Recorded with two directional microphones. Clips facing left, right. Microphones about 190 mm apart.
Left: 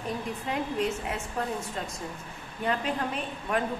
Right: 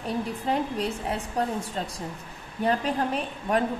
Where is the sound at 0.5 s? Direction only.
35° right (ahead or behind).